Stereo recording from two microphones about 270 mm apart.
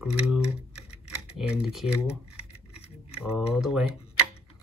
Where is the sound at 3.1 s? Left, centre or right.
Centre.